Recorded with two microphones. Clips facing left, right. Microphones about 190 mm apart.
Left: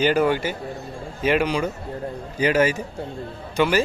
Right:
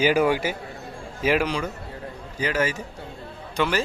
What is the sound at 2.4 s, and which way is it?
Speech, 15° left (ahead or behind).